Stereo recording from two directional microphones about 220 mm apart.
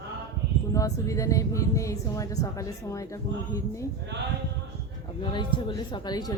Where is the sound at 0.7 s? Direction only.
15° left (ahead or behind).